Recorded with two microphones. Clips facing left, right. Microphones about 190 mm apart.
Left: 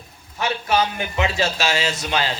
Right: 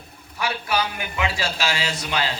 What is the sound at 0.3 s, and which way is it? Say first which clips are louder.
Speech: left 4 dB; 25° left (ahead or behind).